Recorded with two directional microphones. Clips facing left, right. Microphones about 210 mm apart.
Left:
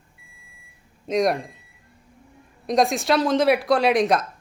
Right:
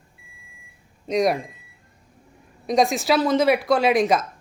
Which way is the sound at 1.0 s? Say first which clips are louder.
Even; centre (ahead or behind).